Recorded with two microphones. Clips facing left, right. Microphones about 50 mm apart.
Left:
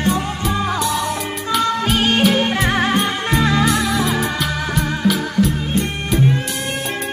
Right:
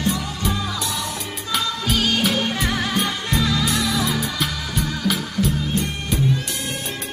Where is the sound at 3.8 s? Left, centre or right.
Centre.